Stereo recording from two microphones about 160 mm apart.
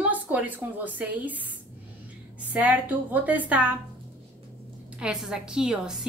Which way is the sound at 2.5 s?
10° right (ahead or behind).